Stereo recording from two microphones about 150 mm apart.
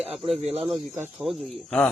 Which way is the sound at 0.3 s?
45° right (ahead or behind).